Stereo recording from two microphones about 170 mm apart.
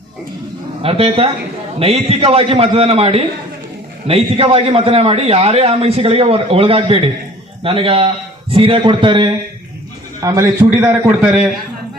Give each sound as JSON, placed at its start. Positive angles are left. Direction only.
{"t": 0.8, "sound": "a man's voice", "side_deg": -35}
{"t": 10.2, "sound": "a man's voice", "side_deg": -20}